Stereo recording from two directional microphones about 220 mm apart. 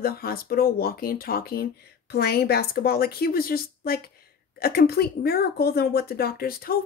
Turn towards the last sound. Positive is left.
turn(degrees=40)  # may be behind; listen again after turning